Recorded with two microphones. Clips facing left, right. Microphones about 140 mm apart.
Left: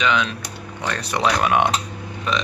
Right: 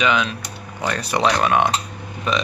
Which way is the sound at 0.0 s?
5° right (ahead or behind).